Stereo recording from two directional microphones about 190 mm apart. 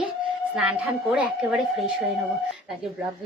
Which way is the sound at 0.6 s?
Centre (ahead or behind).